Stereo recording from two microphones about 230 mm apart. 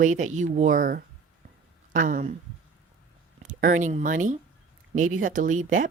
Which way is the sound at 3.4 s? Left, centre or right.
Right.